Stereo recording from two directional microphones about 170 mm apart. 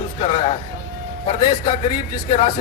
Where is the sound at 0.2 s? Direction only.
35° left (ahead or behind).